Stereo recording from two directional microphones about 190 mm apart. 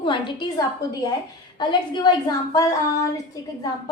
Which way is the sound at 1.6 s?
25° left (ahead or behind).